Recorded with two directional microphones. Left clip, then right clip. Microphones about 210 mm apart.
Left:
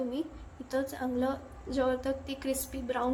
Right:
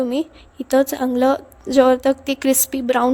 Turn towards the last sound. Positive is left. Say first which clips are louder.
# right 15 dB
turn(degrees=-45)  # may be behind; listen again after turning